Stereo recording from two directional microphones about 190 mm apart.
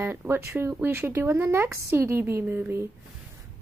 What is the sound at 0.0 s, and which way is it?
Speech, 10° right (ahead or behind).